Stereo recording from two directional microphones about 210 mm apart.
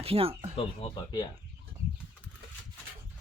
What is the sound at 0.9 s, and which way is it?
Speech, 20° left (ahead or behind).